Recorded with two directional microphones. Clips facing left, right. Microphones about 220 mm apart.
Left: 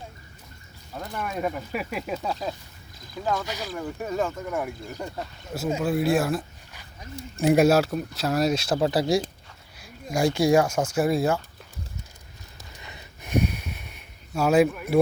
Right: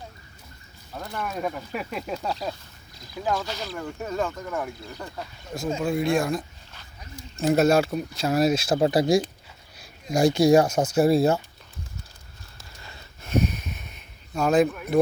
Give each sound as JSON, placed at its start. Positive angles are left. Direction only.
{"t": 0.9, "sound": "speech", "side_deg": 5}
{"t": 2.2, "sound": "speech", "side_deg": -5}
{"t": 3.4, "sound": "speech", "side_deg": 10}
{"t": 8.7, "sound": "speech", "side_deg": -20}
{"t": 10.1, "sound": "speech", "side_deg": -20}
{"t": 10.5, "sound": "speech", "side_deg": -40}
{"t": 12.8, "sound": "snort", "side_deg": 20}
{"t": 14.3, "sound": "speech", "side_deg": 10}